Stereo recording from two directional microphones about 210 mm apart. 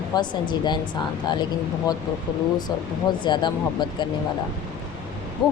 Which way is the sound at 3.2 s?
20° left (ahead or behind).